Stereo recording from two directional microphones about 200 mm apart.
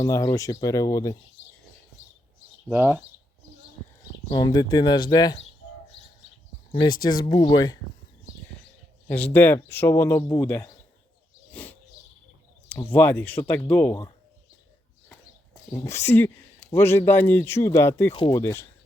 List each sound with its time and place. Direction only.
0.0 s speech: 20° left (ahead or behind)
2.6 s speech: 10° right (ahead or behind)
4.3 s speech: 20° left (ahead or behind)
6.7 s speech: 25° left (ahead or behind)
9.1 s speech: 10° left (ahead or behind)
13.0 s speech: 10° left (ahead or behind)
15.7 s speech: 15° left (ahead or behind)